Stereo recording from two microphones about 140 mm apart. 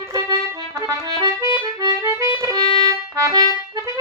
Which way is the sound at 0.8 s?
25° right (ahead or behind).